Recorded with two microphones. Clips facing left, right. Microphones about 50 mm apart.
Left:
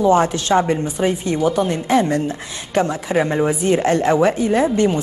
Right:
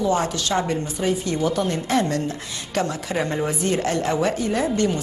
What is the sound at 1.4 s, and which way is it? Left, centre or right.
A woman's voice, centre.